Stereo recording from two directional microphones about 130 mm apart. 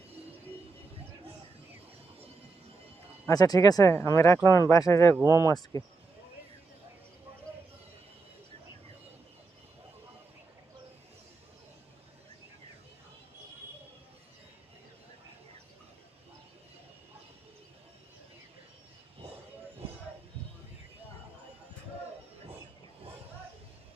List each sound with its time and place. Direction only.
3.2 s speech: 30° left (ahead or behind)